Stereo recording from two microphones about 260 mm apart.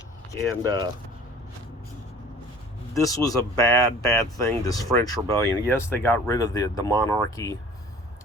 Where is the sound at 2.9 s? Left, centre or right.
Centre.